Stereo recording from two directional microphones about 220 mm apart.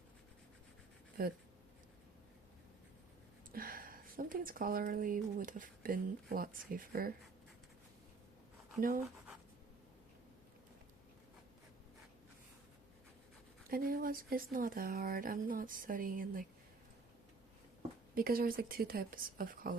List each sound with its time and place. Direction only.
1.2 s speech: 40° right (ahead or behind)
3.5 s speech: 40° right (ahead or behind)
13.7 s speech: 40° right (ahead or behind)
18.1 s speech: 40° right (ahead or behind)